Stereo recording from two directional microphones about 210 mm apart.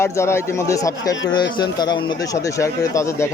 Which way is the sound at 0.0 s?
10° left (ahead or behind).